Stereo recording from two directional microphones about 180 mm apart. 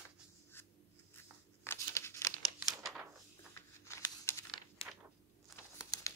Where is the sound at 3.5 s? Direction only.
15° left (ahead or behind).